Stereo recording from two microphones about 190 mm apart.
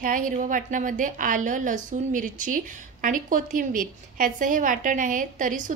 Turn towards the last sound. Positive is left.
turn(degrees=-45)  # may be behind; listen again after turning